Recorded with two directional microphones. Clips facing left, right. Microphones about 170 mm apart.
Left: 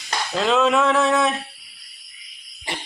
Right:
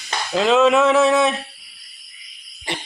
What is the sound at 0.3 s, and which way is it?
Speech, centre (ahead or behind).